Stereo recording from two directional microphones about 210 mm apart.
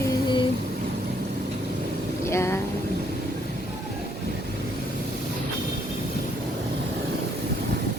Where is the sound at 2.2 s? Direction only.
15° left (ahead or behind).